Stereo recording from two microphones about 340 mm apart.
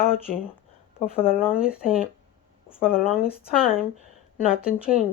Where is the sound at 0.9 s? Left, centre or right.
Centre.